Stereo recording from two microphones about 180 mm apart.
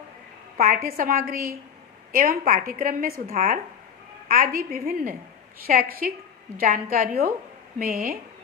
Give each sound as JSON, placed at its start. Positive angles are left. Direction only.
{"t": 0.5, "sound": "a woman's voice", "side_deg": -50}